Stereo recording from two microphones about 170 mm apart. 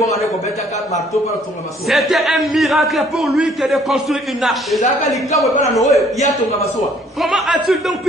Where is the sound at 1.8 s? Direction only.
Centre (ahead or behind).